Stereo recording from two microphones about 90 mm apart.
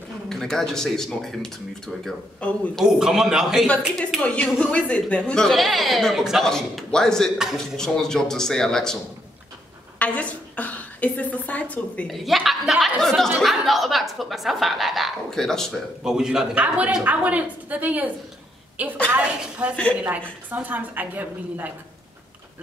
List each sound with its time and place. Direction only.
0.3 s a woman's voice: 5° left (ahead or behind)
2.8 s speech: 5° right (ahead or behind)
3.6 s a woman's voice: 15° left (ahead or behind)
9.9 s a sound: 15° left (ahead or behind)
11.7 s a woman's voice: 15° left (ahead or behind)
12.1 s a woman's voice: centre (ahead or behind)
16.0 s a woman's voice: 5° right (ahead or behind)
19.7 s a woman's voice: 15° left (ahead or behind)
20.0 s a woman's voice: 15° right (ahead or behind)